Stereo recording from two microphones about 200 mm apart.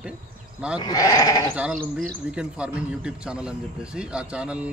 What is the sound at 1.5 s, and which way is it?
Speech, 5° right (ahead or behind).